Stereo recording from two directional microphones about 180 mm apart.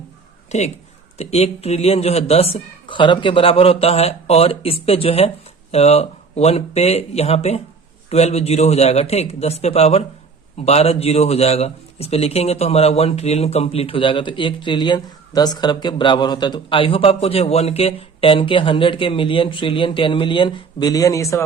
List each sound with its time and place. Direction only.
0.5 s a man's voice: 40° left (ahead or behind); by 21.4 s 15° left (ahead or behind)